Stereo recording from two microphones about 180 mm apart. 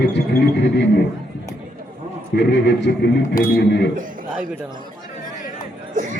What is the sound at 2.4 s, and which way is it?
Speech, 75° left (ahead or behind).